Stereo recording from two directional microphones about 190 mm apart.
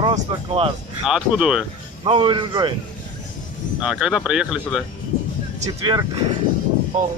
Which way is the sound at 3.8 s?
5° right (ahead or behind).